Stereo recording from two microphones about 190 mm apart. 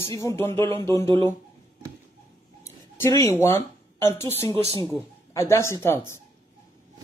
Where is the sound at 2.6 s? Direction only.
15° left (ahead or behind).